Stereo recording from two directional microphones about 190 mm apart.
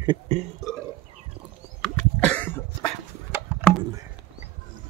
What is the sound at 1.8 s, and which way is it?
Cough, 5° left (ahead or behind).